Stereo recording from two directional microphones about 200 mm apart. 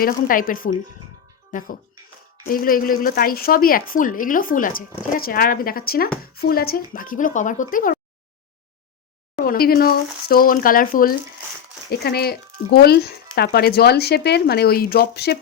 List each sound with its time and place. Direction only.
0.0 s speech: 45° left (ahead or behind)
9.4 s speech: 45° left (ahead or behind)